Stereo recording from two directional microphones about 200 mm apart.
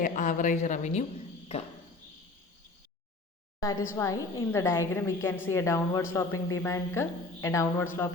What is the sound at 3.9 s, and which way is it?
A woman's voice, 15° left (ahead or behind).